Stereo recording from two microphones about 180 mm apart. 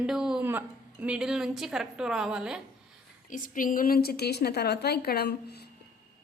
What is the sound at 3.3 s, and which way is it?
A woman's voice, 50° left (ahead or behind).